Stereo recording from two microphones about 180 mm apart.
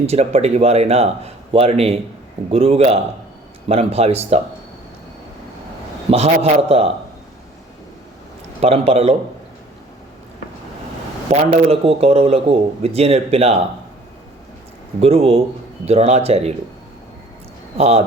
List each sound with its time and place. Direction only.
0.0 s a man's voice: 35° right (ahead or behind)
6.1 s a man's voice: 35° right (ahead or behind)
8.6 s a man's voice: 35° right (ahead or behind)
11.3 s a man's voice: 30° right (ahead or behind)
15.0 s a man's voice: 35° right (ahead or behind)
17.7 s a man's voice: 35° right (ahead or behind)